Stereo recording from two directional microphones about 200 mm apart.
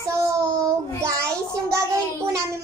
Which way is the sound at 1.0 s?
15° right (ahead or behind).